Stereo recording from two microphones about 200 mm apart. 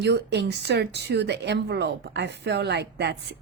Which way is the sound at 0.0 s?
60° right (ahead or behind).